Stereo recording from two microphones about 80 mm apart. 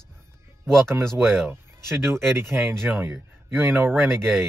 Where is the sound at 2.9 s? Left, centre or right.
Right.